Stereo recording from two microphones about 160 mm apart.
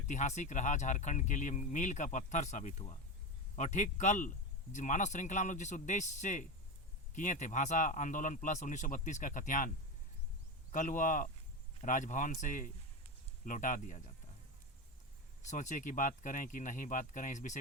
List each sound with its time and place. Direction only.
0.1 s speech: 50° left (ahead or behind)
15.4 s speech: 50° left (ahead or behind)